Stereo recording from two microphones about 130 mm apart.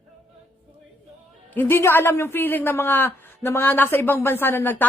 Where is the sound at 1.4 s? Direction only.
15° left (ahead or behind).